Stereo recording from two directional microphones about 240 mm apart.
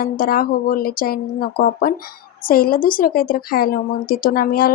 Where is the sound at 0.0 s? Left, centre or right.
Left.